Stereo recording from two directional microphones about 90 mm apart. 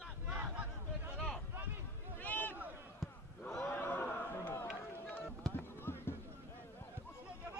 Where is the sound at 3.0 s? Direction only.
5° left (ahead or behind).